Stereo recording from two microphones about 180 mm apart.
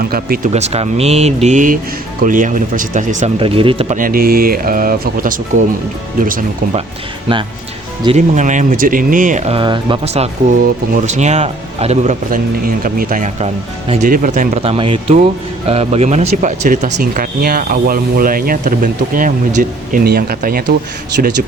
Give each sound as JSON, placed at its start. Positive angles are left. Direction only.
{"t": 0.0, "sound": "speech", "side_deg": -55}
{"t": 0.5, "sound": "speech", "side_deg": -35}
{"t": 3.9, "sound": "speech", "side_deg": -50}
{"t": 8.0, "sound": "speech", "side_deg": -40}
{"t": 14.1, "sound": "speech", "side_deg": -45}